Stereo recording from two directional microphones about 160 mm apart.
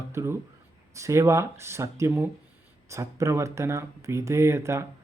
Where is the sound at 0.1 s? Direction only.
15° right (ahead or behind).